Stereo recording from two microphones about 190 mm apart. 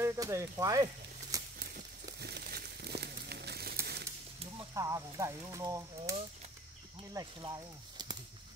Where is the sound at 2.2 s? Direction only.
55° right (ahead or behind).